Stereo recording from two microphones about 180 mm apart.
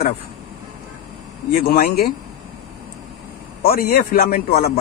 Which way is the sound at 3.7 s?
55° left (ahead or behind).